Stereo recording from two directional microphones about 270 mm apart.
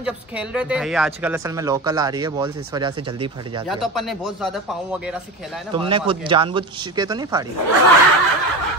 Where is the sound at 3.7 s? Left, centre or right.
Centre.